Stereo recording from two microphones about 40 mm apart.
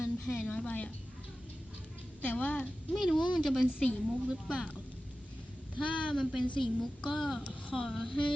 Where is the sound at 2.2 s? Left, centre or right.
Left.